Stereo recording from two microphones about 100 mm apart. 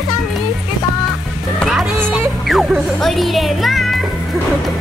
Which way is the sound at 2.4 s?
5° right (ahead or behind).